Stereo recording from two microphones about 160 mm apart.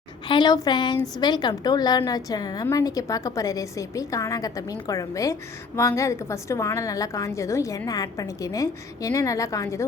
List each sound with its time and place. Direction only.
0.3 s a woman's voice: 30° left (ahead or behind)